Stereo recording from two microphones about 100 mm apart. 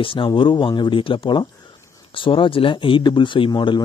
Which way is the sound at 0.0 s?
60° left (ahead or behind).